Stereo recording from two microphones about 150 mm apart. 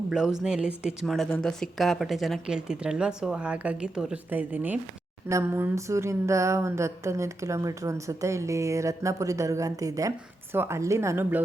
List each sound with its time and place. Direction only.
0.1 s a woman's voice: 5° right (ahead or behind)